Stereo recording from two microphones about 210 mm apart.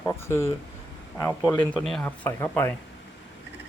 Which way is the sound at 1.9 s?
5° left (ahead or behind).